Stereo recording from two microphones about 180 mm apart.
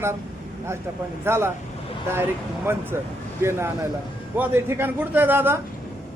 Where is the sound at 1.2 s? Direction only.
15° right (ahead or behind).